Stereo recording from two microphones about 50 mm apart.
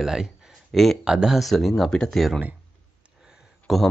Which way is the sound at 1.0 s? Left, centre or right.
Centre.